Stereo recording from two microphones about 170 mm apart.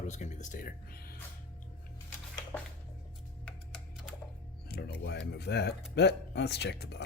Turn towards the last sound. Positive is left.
turn(degrees=75)  # may be behind; listen again after turning